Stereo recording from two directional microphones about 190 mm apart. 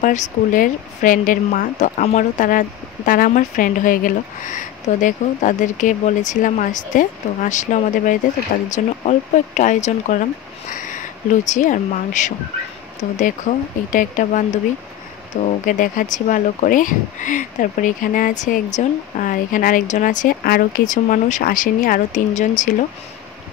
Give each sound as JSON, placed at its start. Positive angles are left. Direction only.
{"t": 0.0, "sound": "speech", "side_deg": 40}